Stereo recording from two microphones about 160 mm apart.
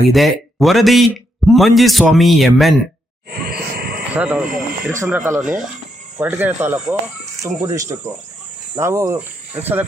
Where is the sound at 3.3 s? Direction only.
70° right (ahead or behind).